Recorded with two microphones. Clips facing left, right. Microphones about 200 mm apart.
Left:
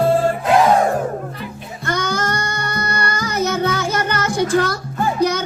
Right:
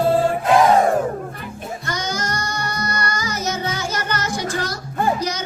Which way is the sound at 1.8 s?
55° left (ahead or behind).